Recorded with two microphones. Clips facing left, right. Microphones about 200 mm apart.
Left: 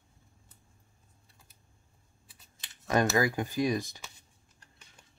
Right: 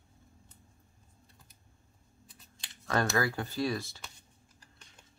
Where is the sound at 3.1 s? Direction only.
15° left (ahead or behind).